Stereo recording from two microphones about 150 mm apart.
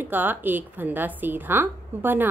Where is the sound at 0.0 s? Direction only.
10° right (ahead or behind).